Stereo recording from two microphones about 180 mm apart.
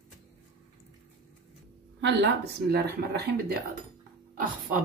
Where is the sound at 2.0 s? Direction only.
70° right (ahead or behind).